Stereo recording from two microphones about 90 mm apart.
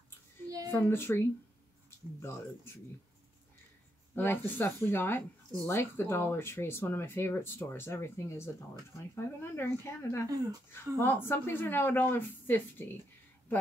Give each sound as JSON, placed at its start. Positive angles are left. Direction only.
{"t": 0.7, "sound": "speech", "side_deg": 25}
{"t": 4.1, "sound": "speech", "side_deg": 25}
{"t": 10.2, "sound": "speech", "side_deg": -40}
{"t": 10.7, "sound": "speech", "side_deg": 25}